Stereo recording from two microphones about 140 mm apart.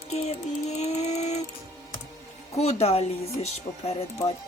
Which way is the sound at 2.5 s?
50° left (ahead or behind).